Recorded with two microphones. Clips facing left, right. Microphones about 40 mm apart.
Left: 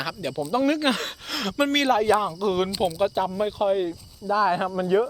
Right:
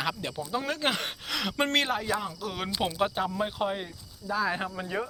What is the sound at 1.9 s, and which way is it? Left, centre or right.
Speech, centre.